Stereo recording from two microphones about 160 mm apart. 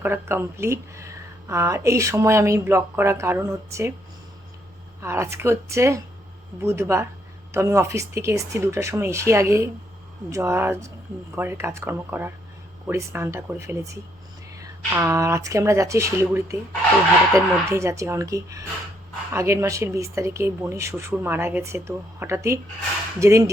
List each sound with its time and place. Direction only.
0.0 s speech: 15° right (ahead or behind)
5.0 s speech: 15° right (ahead or behind)